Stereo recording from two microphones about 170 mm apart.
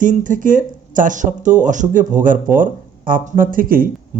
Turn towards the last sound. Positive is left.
turn(degrees=-55)  # may be behind; listen again after turning